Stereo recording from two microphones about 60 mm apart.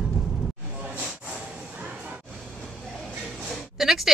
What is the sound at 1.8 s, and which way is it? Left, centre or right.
Music, right.